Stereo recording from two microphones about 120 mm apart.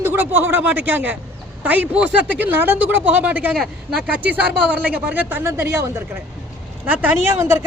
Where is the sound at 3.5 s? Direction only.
Centre (ahead or behind).